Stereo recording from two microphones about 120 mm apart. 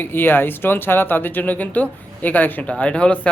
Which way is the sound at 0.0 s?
15° left (ahead or behind).